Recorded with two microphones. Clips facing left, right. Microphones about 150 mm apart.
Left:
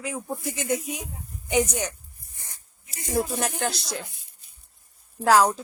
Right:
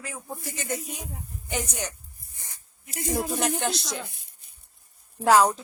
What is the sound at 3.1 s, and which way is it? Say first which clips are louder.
Speech: left 2 dB; centre (ahead or behind).